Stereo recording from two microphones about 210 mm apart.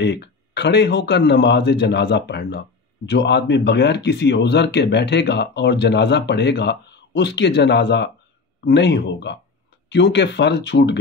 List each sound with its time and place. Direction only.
0.0 s speech: 55° left (ahead or behind)